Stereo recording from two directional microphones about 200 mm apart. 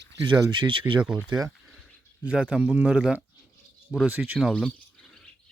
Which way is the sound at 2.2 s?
5° right (ahead or behind).